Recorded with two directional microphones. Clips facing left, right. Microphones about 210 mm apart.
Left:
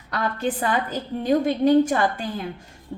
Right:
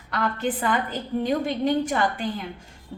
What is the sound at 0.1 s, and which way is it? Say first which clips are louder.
A woman's voice: left 1 dB; 40° left (ahead or behind).